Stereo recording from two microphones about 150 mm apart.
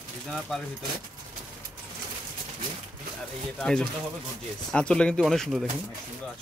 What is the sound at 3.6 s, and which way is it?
Speech, 5° left (ahead or behind).